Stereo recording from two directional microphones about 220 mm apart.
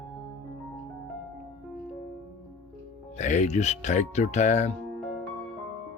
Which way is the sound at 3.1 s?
30° left (ahead or behind).